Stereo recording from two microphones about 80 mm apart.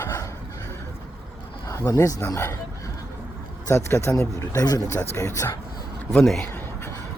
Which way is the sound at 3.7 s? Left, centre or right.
Left.